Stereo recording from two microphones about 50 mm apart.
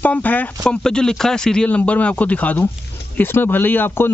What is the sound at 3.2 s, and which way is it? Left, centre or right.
Speech, left.